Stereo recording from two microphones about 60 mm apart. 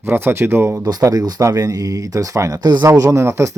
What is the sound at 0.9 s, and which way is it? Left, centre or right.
Speech, right.